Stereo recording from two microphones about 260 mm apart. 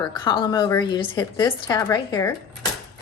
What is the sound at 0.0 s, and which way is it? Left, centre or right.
Speech, centre.